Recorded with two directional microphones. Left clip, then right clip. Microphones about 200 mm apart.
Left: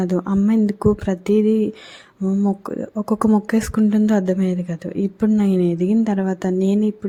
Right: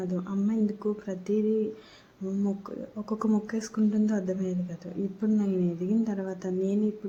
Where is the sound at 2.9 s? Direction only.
40° left (ahead or behind).